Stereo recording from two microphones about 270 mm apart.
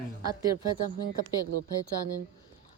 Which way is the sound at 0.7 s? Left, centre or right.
Right.